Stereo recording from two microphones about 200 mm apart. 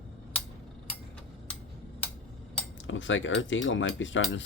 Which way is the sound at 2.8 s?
70° left (ahead or behind).